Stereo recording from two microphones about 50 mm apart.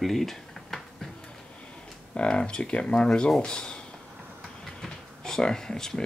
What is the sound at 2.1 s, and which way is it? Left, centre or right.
Speech, left.